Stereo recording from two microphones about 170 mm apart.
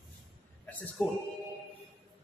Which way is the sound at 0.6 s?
10° left (ahead or behind).